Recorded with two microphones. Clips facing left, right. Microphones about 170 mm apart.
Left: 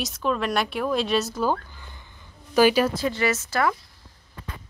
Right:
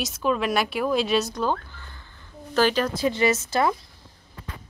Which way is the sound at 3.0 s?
20° right (ahead or behind).